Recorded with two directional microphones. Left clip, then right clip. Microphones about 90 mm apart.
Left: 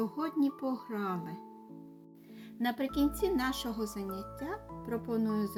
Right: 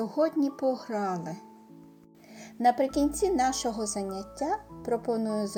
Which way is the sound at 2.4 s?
45° right (ahead or behind).